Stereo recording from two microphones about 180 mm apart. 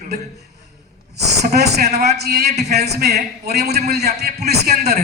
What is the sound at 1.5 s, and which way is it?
A man's voice, 65° right (ahead or behind).